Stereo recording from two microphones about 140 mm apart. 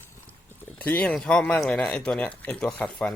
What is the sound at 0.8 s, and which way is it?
Speech, 10° left (ahead or behind).